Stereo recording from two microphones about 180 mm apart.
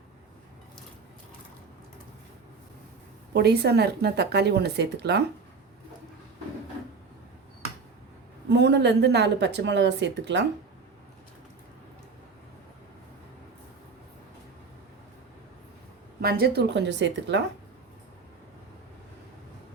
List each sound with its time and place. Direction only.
3.3 s speech: 65° right (ahead or behind)
8.4 s a woman's voice: 70° right (ahead or behind)
16.2 s a woman's voice: 60° right (ahead or behind); by 17.4 s 80° right